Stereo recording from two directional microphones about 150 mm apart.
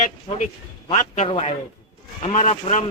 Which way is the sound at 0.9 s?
50° left (ahead or behind).